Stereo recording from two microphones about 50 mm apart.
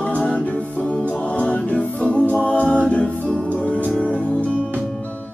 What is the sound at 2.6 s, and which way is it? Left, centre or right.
A capella, left.